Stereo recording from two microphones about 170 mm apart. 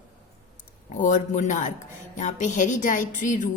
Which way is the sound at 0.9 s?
50° left (ahead or behind).